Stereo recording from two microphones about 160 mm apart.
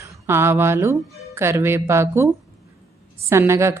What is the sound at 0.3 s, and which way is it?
Speech, 15° right (ahead or behind).